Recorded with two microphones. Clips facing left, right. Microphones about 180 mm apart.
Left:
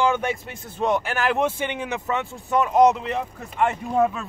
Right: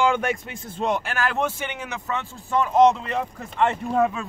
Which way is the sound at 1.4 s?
25° left (ahead or behind).